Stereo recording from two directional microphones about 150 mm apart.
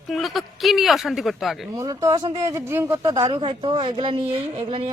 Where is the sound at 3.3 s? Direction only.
30° right (ahead or behind).